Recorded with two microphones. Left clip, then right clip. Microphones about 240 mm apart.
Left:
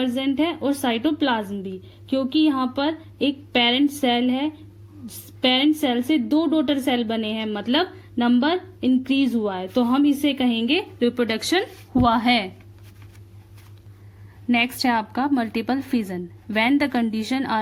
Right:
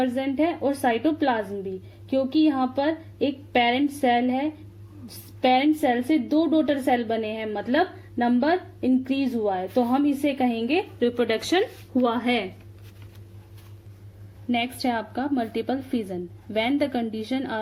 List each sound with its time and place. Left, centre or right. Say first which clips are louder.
0.0 s a woman's voice: left 1 dB; left
14.5 s a woman's voice: left 5 dB; left